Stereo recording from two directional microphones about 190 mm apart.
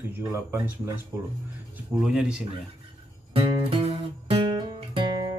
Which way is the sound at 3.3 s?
25° right (ahead or behind).